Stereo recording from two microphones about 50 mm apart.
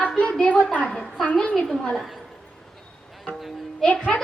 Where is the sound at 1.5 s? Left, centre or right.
Centre.